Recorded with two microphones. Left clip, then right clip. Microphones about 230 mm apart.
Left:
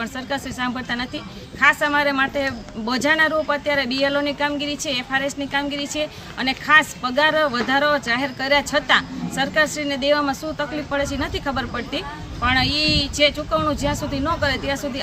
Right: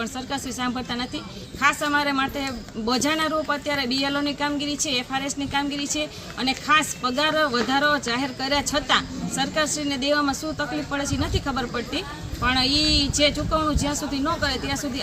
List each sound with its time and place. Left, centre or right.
0.0 s speech: centre